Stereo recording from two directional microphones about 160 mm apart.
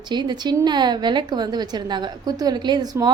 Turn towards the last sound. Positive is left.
turn(degrees=-25)  # may be behind; listen again after turning